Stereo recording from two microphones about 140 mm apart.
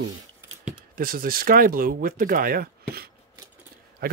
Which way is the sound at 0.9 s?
90° right.